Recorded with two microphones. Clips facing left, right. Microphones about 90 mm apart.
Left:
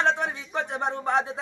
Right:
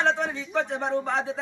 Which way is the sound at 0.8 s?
20° left (ahead or behind).